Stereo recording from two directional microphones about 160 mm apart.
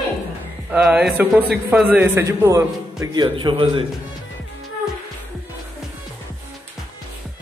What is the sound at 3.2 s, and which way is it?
Speech, 35° right (ahead or behind).